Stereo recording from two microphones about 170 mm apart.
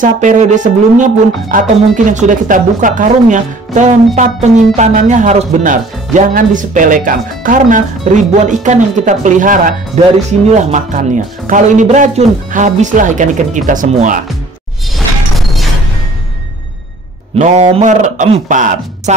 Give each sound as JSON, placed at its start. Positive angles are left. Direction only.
{"t": 0.0, "sound": "speech", "side_deg": -45}
{"t": 15.0, "sound": "a sound", "side_deg": 0}
{"t": 17.4, "sound": "speech", "side_deg": -40}